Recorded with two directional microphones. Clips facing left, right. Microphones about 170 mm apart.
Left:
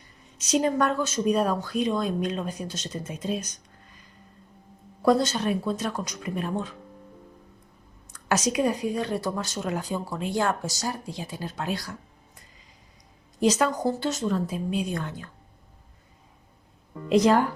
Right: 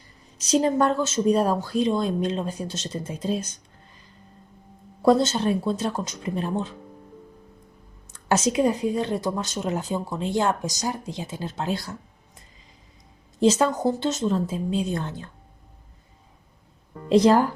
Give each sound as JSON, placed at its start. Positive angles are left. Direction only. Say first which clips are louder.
{"t": 0.4, "sound": "a woman's voice", "louder": "right 3 dB", "side_deg": -30}
{"t": 5.0, "sound": "a woman's voice", "louder": "right 3 dB", "side_deg": -25}
{"t": 8.1, "sound": "a woman's voice", "louder": "right 3 dB", "side_deg": -25}
{"t": 13.4, "sound": "a woman's voice", "louder": "right 3 dB", "side_deg": -25}
{"t": 17.1, "sound": "a woman's voice", "louder": "right 3 dB", "side_deg": -30}